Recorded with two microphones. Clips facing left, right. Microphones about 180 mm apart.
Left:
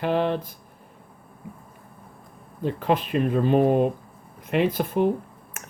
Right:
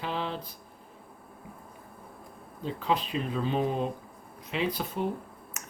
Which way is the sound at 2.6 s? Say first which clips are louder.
Left 6 dB; 55° left (ahead or behind).